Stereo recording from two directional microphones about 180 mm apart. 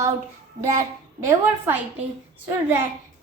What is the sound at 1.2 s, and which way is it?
Speech, 10° right (ahead or behind).